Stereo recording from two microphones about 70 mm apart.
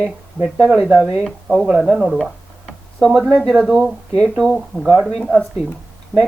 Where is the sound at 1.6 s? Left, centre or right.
Centre.